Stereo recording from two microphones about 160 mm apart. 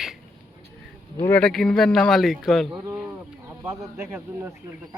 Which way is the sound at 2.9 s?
10° right (ahead or behind).